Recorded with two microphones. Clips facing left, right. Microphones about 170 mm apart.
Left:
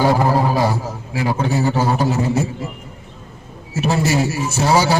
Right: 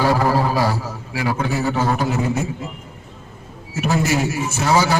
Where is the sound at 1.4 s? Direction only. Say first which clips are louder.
Left 4 dB; 35° left (ahead or behind).